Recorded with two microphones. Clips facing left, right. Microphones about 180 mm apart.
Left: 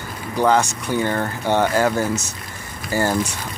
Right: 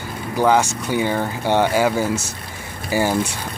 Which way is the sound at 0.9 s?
10° right (ahead or behind).